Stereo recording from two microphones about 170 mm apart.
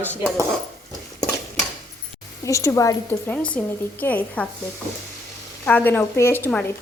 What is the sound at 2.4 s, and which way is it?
Speech, 20° left (ahead or behind).